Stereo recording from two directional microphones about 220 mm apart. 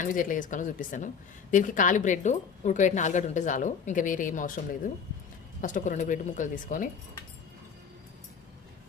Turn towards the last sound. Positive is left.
turn(degrees=35)  # may be behind; listen again after turning